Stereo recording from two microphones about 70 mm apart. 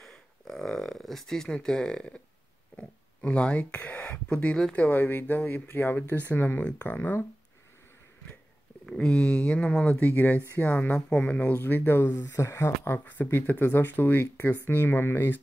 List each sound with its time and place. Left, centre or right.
0.0 s a sound: centre
2.7 s speech: centre
4.7 s speech: left
8.8 s speech: centre; by 15.4 s left